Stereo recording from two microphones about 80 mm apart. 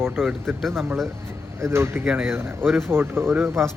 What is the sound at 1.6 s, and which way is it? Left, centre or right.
Speech, right.